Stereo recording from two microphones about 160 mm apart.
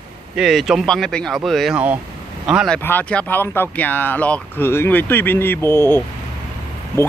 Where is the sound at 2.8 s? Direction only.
10° left (ahead or behind).